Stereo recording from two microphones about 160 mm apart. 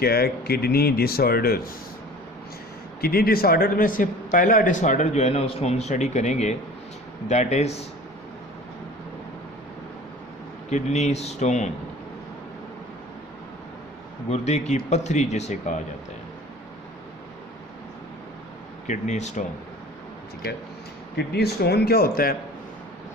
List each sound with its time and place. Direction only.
0.0 s speech: 75° left (ahead or behind)
3.0 s a man's voice: 70° left (ahead or behind); by 7.9 s 40° left (ahead or behind)
10.7 s a man's voice: 45° left (ahead or behind)
14.3 s a man's voice: 45° left (ahead or behind)
18.9 s a man's voice: 45° left (ahead or behind)
21.2 s speech: 90° left; by 22.4 s 70° left (ahead or behind)